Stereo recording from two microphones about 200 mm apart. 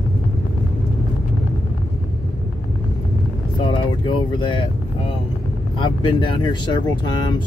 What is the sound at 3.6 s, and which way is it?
Speech, 25° left (ahead or behind).